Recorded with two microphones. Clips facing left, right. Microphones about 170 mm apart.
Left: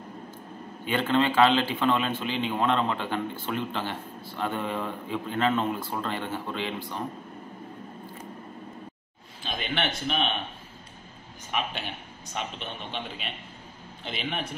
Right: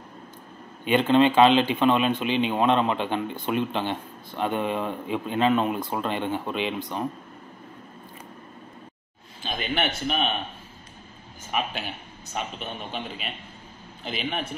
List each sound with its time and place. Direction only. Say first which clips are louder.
0.8 s a man's voice: right 5 dB; 20° right (ahead or behind)
9.4 s a man's voice: right 3 dB; centre (ahead or behind)
12.4 s a man's voice: right 2 dB; 5° right (ahead or behind)